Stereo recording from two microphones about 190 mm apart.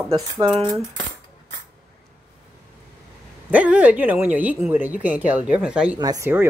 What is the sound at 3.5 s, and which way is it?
Speech, 5° right (ahead or behind).